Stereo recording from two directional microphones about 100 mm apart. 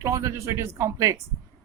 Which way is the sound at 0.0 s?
30° right (ahead or behind).